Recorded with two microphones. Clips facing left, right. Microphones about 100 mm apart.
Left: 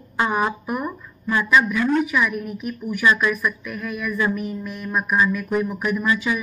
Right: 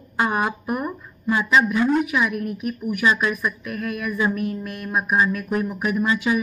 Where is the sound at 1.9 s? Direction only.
5° right (ahead or behind).